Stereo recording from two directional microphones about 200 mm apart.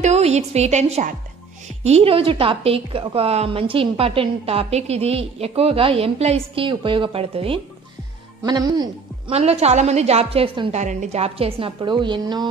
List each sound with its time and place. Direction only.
0.0 s a woman's voice: 35° right (ahead or behind)
9.3 s a woman's voice: 30° right (ahead or behind)
10.8 s a woman's voice: 35° right (ahead or behind)